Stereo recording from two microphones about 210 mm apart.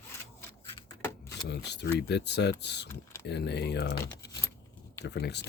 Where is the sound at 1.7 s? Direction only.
55° left (ahead or behind).